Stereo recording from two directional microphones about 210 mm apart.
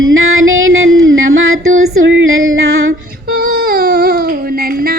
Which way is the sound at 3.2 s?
45° right (ahead or behind).